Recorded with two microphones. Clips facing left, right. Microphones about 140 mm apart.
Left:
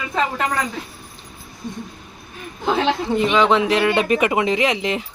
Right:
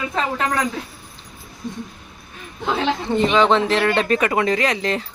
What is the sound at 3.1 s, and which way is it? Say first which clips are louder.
A woman's voice: right 2 dB; 5° left (ahead or behind).